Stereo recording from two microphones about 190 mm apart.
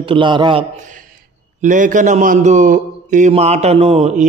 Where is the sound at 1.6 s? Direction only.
40° right (ahead or behind).